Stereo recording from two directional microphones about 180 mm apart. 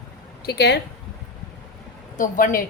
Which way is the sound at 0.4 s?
65° left (ahead or behind).